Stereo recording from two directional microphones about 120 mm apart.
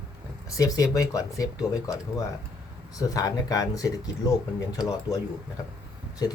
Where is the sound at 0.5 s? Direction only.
30° left (ahead or behind).